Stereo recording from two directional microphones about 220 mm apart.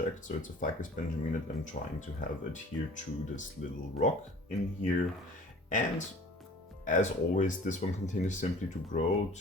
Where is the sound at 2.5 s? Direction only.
35° left (ahead or behind).